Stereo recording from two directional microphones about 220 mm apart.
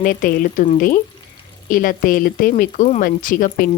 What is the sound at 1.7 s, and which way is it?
Speech, 40° left (ahead or behind).